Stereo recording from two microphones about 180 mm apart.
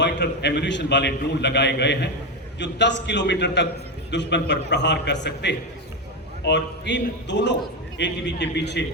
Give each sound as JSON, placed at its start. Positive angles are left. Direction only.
{"t": 0.0, "sound": "a man's voice", "side_deg": 70}